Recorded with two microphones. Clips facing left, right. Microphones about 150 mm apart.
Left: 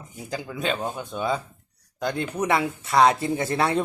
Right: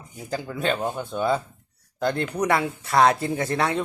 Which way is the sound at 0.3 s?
10° left (ahead or behind).